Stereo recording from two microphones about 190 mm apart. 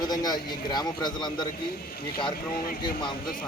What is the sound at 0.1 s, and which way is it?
A man's voice, 20° left (ahead or behind).